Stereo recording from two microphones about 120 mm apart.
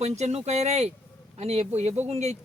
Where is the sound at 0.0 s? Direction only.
65° right (ahead or behind).